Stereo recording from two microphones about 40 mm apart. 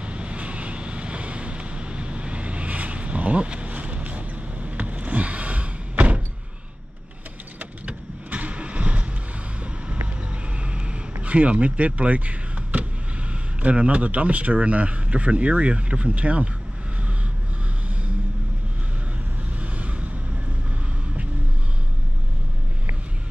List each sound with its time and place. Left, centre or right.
0.0 s vehicle: right
7.5 s vehicle: right
11.2 s a man's voice: right
19.6 s vehicle: right